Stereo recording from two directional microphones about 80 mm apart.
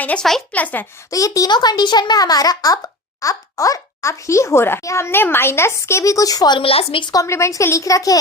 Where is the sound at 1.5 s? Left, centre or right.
Left.